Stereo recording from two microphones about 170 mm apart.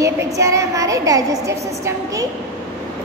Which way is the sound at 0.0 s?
20° right (ahead or behind).